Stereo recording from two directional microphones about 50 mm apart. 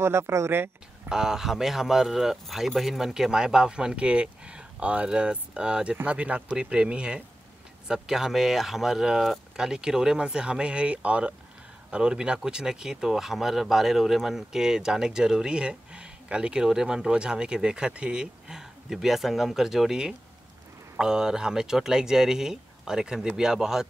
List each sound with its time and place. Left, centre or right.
0.0 s speech: right
1.0 s speech: centre
7.9 s speech: centre